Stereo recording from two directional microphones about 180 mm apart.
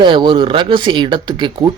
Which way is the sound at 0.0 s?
25° right (ahead or behind).